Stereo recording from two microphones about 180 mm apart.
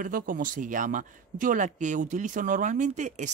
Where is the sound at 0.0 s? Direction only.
50° right (ahead or behind).